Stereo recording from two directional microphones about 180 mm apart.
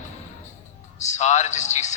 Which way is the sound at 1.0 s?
40° left (ahead or behind).